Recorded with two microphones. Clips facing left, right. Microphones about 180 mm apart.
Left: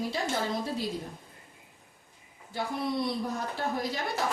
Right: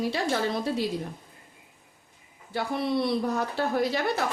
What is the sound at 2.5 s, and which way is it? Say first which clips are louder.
A woman's voice: right 4 dB; 70° right (ahead or behind).